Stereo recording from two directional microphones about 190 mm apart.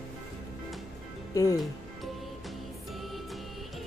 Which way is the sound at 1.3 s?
20° left (ahead or behind).